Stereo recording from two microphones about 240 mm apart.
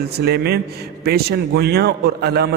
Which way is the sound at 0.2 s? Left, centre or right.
Right.